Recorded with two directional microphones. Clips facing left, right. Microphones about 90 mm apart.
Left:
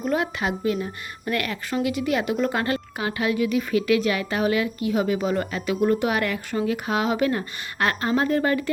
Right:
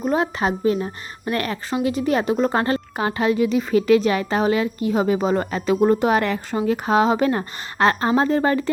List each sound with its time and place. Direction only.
0.0 s a woman's voice: 30° right (ahead or behind)